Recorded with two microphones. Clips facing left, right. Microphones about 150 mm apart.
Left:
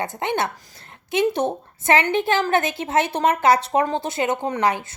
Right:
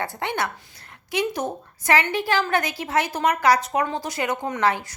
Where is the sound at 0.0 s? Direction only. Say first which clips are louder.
Left 3 dB; 20° left (ahead or behind).